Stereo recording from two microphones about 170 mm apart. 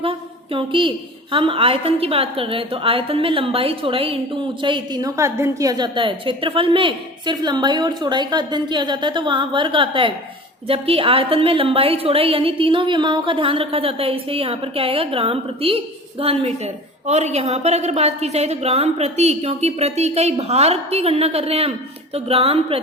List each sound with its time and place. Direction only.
0.0 s a woman's voice: 30° right (ahead or behind)